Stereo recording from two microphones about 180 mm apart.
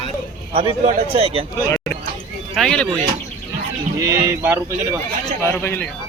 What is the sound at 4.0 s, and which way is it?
Speech, 15° right (ahead or behind).